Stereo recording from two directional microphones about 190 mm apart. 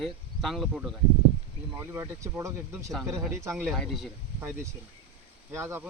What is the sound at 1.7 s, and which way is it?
Speech, 10° right (ahead or behind).